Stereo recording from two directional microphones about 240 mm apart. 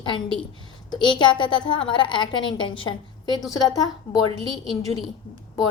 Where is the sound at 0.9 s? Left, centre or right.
Centre.